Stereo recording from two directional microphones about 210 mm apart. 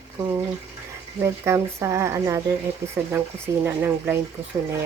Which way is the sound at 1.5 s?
15° right (ahead or behind).